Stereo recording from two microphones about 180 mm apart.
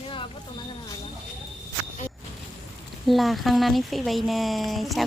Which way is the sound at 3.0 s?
Centre (ahead or behind).